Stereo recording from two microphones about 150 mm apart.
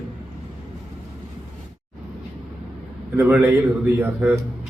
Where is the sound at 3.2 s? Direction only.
10° right (ahead or behind).